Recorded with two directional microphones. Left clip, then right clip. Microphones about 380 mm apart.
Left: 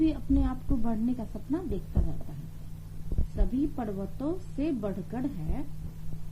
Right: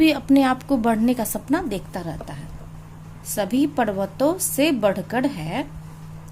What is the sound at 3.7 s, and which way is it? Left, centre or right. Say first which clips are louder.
A woman's voice: right 14 dB; right.